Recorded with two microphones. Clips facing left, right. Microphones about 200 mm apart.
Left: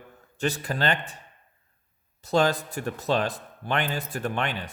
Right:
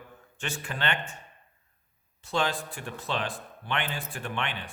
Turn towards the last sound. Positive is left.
turn(degrees=40)  # may be behind; listen again after turning